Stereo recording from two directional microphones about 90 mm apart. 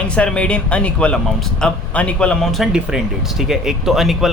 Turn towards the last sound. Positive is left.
turn(degrees=0)  # may be behind; listen again after turning